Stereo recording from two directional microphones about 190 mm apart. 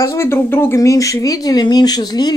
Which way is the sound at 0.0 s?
15° left (ahead or behind).